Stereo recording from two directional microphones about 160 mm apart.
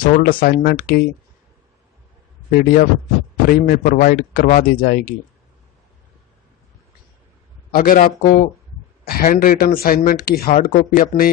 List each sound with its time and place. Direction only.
0.0 s speech: 60° left (ahead or behind)
2.5 s speech: 65° left (ahead or behind)
7.7 s speech: 60° left (ahead or behind)